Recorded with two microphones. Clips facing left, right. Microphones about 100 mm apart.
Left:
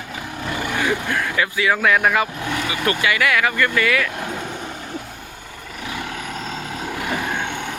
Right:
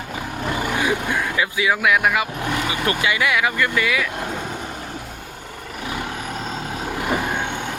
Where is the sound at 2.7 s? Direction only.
25° right (ahead or behind).